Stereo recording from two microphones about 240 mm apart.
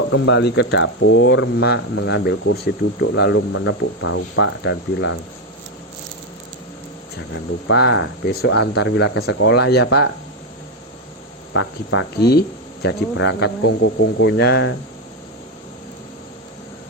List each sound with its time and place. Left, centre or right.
0.1 s speech: left
7.7 s speech: left
11.5 s speech: left
12.2 s speech: left